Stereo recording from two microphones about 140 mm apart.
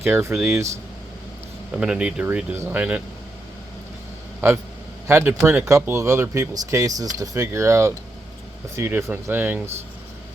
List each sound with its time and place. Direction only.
0.0 s speech: 15° right (ahead or behind)
1.7 s speech: 5° right (ahead or behind)
4.4 s speech: 15° right (ahead or behind)